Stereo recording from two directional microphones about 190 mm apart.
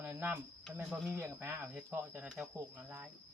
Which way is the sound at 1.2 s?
15° right (ahead or behind).